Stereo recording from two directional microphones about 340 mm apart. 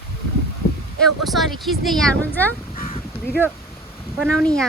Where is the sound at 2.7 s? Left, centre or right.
Left.